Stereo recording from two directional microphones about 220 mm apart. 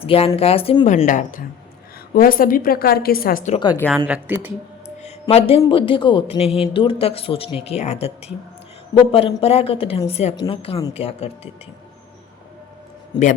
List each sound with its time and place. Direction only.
0.0 s a woman's voice: 25° left (ahead or behind)
3.6 s a woman's voice: 20° left (ahead or behind)
3.9 s speech: 5° right (ahead or behind)
5.2 s speech: 25° left (ahead or behind)